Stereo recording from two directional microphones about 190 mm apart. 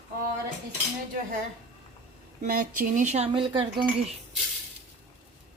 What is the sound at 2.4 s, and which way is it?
Speech, 45° right (ahead or behind).